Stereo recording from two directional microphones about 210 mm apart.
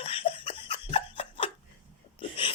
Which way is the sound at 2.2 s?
25° left (ahead or behind).